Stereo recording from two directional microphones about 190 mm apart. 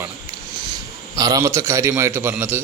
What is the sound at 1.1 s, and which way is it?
A man's voice, 20° right (ahead or behind).